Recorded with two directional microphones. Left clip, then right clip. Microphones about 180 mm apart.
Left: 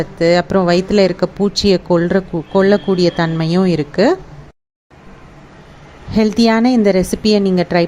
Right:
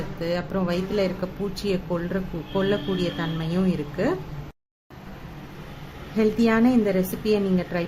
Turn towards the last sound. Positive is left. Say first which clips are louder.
# left 10 dB
turn(degrees=40)  # may be behind; listen again after turning